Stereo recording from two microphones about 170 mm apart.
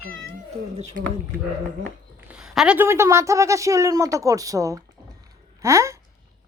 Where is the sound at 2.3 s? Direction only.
5° right (ahead or behind).